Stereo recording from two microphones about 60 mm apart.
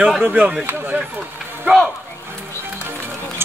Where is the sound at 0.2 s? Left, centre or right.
Centre.